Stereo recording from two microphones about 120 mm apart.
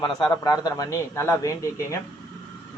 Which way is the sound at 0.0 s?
35° left (ahead or behind).